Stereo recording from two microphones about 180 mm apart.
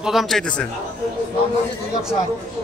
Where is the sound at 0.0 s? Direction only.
Centre (ahead or behind).